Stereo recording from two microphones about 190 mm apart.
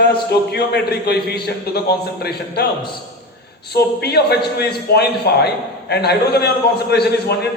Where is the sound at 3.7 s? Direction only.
60° left (ahead or behind).